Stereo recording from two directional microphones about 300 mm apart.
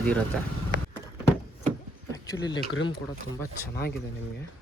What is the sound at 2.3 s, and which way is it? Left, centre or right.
Speech, centre.